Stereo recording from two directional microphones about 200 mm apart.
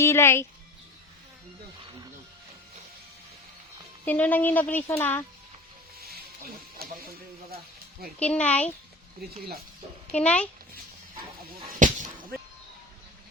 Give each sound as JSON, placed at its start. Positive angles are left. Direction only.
{"t": 0.0, "sound": "a woman's voice", "side_deg": 10}
{"t": 4.0, "sound": "a woman's voice", "side_deg": 10}
{"t": 6.0, "sound": "music", "side_deg": -50}
{"t": 6.8, "sound": "a sound", "side_deg": -50}
{"t": 8.2, "sound": "a woman's voice", "side_deg": 5}
{"t": 10.1, "sound": "a woman's voice", "side_deg": 5}
{"t": 11.8, "sound": "a sound", "side_deg": -40}